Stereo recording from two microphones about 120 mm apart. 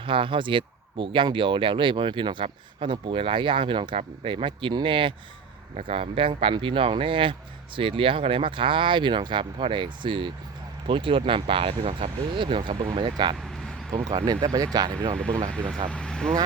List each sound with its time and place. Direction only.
0.0 s speech: 45° right (ahead or behind)
14.4 s speech: 30° right (ahead or behind)
15.4 s speech: 10° left (ahead or behind)